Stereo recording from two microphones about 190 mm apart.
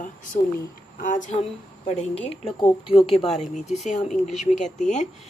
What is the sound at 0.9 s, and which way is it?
A woman's voice, 45° left (ahead or behind).